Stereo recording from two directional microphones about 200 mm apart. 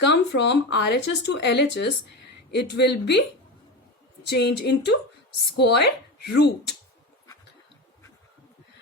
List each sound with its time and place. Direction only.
0.0 s speech: 60° left (ahead or behind)
4.3 s speech: 55° left (ahead or behind)